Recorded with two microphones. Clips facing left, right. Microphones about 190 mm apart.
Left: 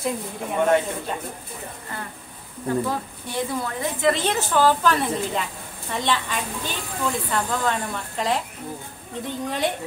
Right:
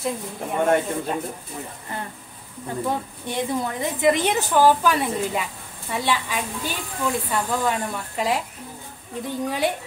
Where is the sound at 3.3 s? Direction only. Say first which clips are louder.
Right 2 dB; 20° right (ahead or behind).